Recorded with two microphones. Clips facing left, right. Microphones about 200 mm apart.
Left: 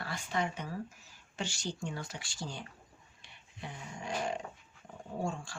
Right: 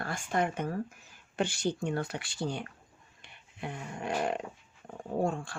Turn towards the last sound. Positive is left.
turn(degrees=-60)  # may be behind; listen again after turning